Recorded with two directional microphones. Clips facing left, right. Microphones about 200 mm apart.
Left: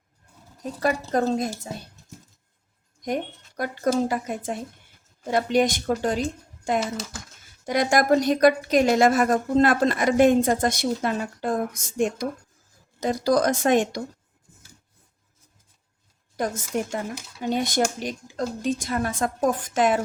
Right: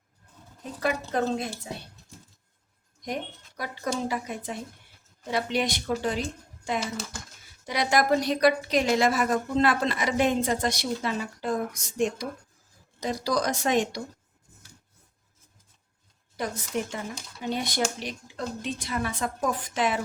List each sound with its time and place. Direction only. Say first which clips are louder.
0.6 s speech: left 4 dB; 40° left (ahead or behind)
3.6 s a woman's voice: left 7 dB; 50° left (ahead or behind)
16.4 s a woman's voice: left 4 dB; 45° left (ahead or behind)